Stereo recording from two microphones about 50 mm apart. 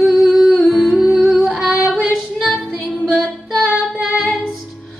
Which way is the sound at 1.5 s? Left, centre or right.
Centre.